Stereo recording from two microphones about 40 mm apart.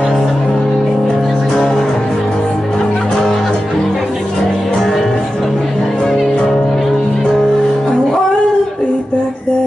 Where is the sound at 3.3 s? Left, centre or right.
Centre.